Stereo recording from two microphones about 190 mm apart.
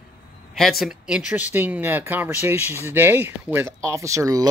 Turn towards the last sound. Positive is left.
turn(degrees=-20)  # may be behind; listen again after turning